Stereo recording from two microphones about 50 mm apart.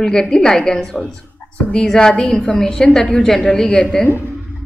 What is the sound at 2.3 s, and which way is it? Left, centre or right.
A woman's voice, left.